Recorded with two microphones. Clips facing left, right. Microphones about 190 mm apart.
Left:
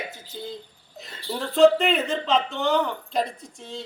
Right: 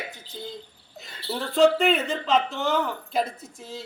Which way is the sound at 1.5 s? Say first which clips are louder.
Left 2 dB; centre (ahead or behind).